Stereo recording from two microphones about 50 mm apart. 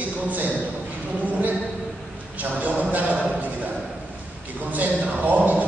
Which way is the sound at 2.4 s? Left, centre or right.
Right.